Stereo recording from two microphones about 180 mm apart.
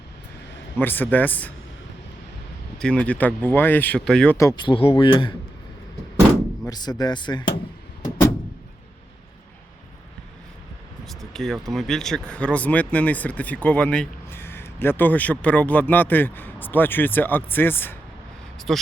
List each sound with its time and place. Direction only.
0.8 s speech: 10° left (ahead or behind)
2.7 s speech: 5° left (ahead or behind)
4.4 s speech: 20° left (ahead or behind)
6.7 s speech: 20° left (ahead or behind)
11.0 s speech: centre (ahead or behind)
18.7 s speech: centre (ahead or behind)